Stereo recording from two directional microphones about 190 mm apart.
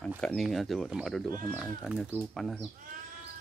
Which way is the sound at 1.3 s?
20° left (ahead or behind).